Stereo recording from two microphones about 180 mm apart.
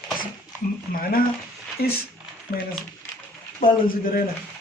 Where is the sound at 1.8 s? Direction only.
60° left (ahead or behind).